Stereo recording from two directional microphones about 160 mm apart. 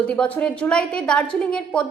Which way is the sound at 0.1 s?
10° left (ahead or behind).